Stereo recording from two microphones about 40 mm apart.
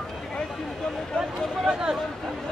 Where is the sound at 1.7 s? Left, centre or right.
Centre.